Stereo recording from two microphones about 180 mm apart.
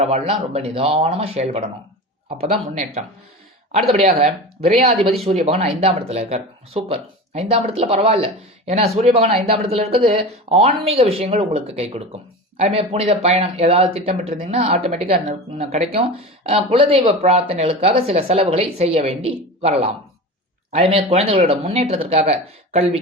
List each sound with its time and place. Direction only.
0.0 s speech: 35° right (ahead or behind)
20.9 s speech: 35° right (ahead or behind)